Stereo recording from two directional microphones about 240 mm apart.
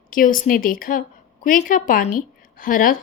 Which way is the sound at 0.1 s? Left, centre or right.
Left.